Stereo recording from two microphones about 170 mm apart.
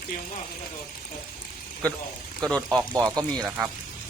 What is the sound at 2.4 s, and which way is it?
Speech, 5° left (ahead or behind).